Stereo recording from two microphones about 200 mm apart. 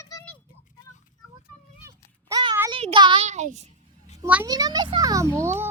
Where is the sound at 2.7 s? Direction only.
25° right (ahead or behind).